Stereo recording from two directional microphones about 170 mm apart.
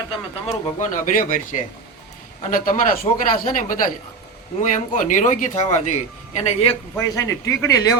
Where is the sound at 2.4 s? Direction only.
50° left (ahead or behind).